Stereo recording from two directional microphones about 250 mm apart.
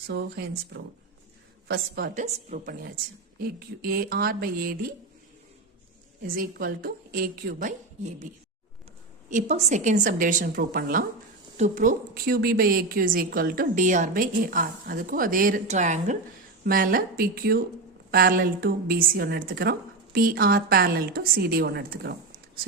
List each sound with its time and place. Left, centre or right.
0.1 s a woman's voice: right
1.6 s a woman's voice: right
6.2 s a woman's voice: right
9.3 s a woman's voice: right